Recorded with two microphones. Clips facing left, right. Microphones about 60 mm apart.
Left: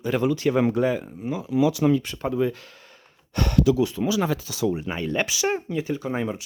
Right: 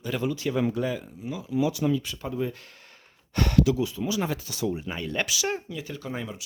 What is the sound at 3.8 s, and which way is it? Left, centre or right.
Speech, left.